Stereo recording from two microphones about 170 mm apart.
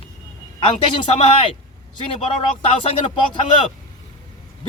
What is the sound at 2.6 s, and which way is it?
Speech, 35° left (ahead or behind).